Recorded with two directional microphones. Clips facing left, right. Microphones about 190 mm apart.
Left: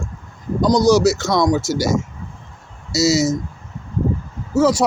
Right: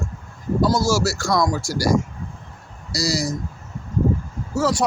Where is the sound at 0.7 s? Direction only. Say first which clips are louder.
Left 7 dB; 20° left (ahead or behind).